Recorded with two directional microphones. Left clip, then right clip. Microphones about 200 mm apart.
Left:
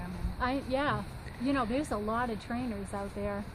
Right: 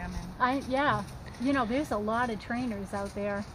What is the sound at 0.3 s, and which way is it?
A woman's voice, 25° right (ahead or behind).